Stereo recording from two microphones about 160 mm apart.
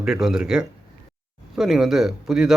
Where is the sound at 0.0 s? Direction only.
Centre (ahead or behind).